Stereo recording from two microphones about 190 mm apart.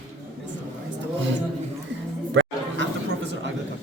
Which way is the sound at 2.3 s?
75° right (ahead or behind).